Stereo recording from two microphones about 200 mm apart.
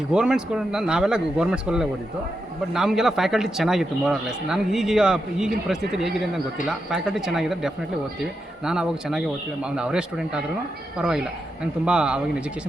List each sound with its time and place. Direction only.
0.1 s speech: 5° right (ahead or behind)